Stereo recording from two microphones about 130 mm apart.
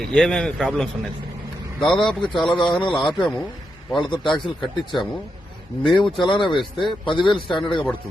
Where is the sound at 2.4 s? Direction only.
35° left (ahead or behind).